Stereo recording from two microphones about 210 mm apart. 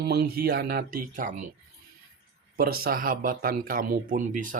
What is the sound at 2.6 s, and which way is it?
Speech, 45° right (ahead or behind).